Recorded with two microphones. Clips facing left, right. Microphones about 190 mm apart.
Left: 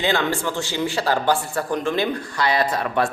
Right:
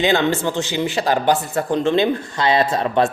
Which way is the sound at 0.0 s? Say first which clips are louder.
Right 4 dB; 20° right (ahead or behind).